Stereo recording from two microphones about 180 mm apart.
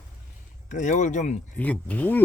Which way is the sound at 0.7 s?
40° left (ahead or behind).